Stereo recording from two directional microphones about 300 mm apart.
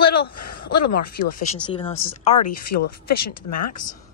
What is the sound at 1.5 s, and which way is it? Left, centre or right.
Speech, centre.